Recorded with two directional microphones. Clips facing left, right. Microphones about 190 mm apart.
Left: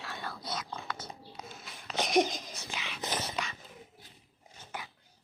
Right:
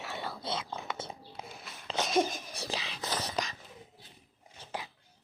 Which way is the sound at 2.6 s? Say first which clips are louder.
Right 4 dB; 35° right (ahead or behind).